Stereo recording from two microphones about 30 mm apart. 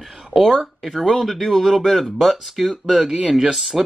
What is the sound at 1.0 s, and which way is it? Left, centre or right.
Speech, centre.